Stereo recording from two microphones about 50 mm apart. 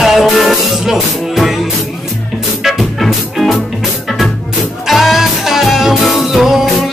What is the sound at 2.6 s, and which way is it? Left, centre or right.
Music, centre.